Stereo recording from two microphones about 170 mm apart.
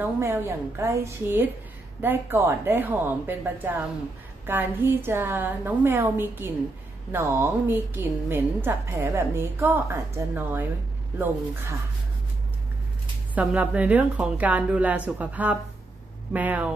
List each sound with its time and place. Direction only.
0.0 s a woman's voice: 15° right (ahead or behind)
13.3 s a woman's voice: 10° right (ahead or behind)